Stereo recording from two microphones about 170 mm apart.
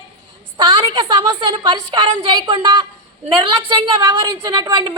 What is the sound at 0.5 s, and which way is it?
A woman's voice, 25° right (ahead or behind).